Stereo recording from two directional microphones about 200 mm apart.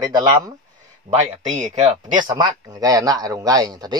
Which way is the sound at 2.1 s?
20° right (ahead or behind).